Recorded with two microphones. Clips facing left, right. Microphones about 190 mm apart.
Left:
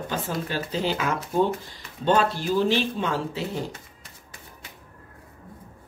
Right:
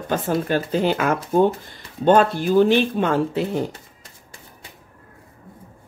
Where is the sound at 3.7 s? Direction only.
30° right (ahead or behind).